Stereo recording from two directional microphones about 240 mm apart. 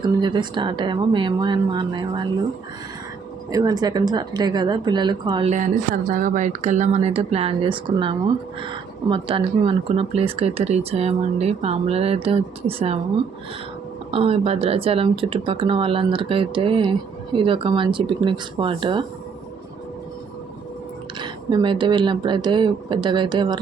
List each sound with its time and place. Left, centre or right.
0.0 s speech: centre
3.5 s speech: centre
14.1 s speech: right
21.2 s speech: centre